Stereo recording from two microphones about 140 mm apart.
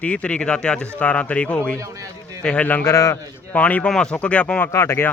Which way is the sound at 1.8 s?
20° right (ahead or behind).